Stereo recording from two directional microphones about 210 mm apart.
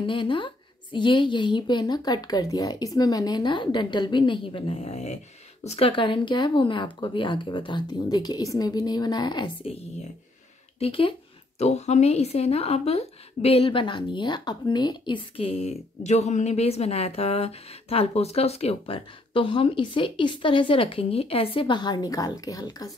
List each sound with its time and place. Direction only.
0.0 s a woman's voice: 25° left (ahead or behind)
10.8 s a woman's voice: 25° left (ahead or behind)